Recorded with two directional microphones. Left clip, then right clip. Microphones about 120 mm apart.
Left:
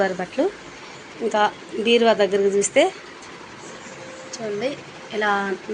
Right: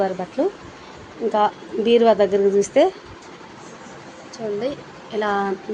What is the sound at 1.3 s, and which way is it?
A woman's voice, 25° right (ahead or behind).